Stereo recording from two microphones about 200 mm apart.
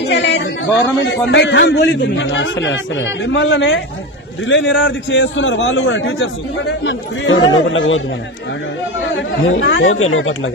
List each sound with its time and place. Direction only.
0.0 s a sound: 60° left (ahead or behind)
1.3 s a man's voice: 60° left (ahead or behind); by 6.1 s 80° left
6.7 s a man's voice: 70° left (ahead or behind)
9.6 s a man's voice: 70° left (ahead or behind)